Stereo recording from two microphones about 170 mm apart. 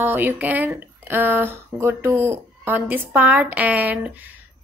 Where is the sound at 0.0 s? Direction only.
10° right (ahead or behind).